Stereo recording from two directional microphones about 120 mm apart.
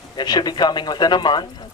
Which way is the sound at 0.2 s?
35° left (ahead or behind).